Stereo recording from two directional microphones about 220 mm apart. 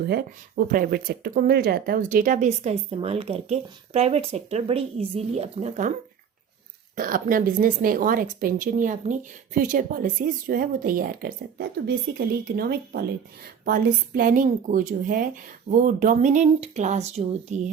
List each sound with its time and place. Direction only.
0.1 s speech: 45° right (ahead or behind)
6.9 s speech: 40° right (ahead or behind)